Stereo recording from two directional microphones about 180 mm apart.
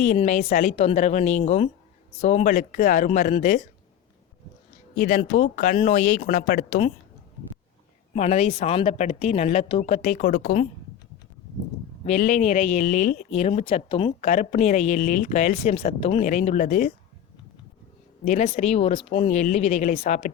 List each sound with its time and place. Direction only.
0.3 s speech: 40° left (ahead or behind)
4.9 s speech: 45° left (ahead or behind)
8.1 s speech: 40° left (ahead or behind)
12.0 s speech: 40° left (ahead or behind)
18.3 s speech: 40° left (ahead or behind)